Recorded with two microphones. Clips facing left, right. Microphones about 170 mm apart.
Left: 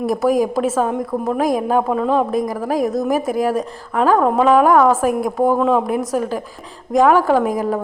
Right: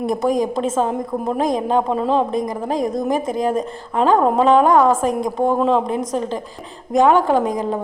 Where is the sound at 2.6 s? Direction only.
5° left (ahead or behind).